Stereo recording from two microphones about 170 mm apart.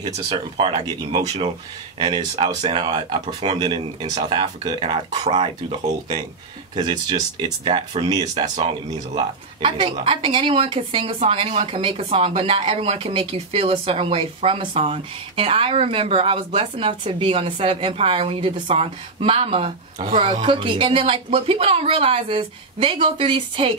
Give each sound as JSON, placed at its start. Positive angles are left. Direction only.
{"t": 0.0, "sound": "a woman's voice", "side_deg": -40}
{"t": 4.0, "sound": "speech", "side_deg": -45}
{"t": 4.3, "sound": "a woman's voice", "side_deg": -30}